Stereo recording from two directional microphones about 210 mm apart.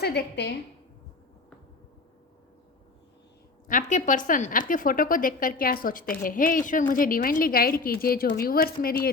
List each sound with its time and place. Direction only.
0.0 s a woman's voice: 50° left (ahead or behind)
3.7 s a woman's voice: 35° left (ahead or behind)